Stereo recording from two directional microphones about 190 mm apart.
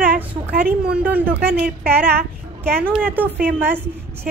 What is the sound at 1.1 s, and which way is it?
Speech, 10° right (ahead or behind).